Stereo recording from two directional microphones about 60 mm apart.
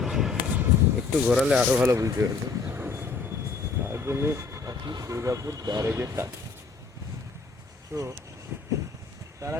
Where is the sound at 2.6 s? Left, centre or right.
Right.